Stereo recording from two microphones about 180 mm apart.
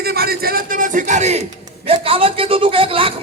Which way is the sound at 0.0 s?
60° right (ahead or behind).